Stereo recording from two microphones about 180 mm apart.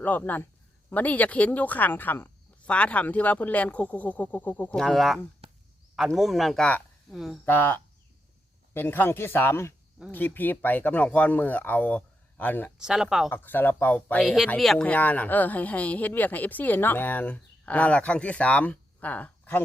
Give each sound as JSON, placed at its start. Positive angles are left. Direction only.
{"t": 0.0, "sound": "speech", "side_deg": 10}
{"t": 5.4, "sound": "a sound", "side_deg": -35}
{"t": 6.0, "sound": "speech", "side_deg": 0}
{"t": 7.4, "sound": "speech", "side_deg": 10}
{"t": 12.8, "sound": "speech", "side_deg": 0}
{"t": 13.3, "sound": "speech", "side_deg": 10}